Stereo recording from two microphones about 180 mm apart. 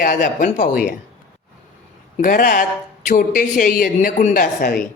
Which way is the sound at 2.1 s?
50° left (ahead or behind).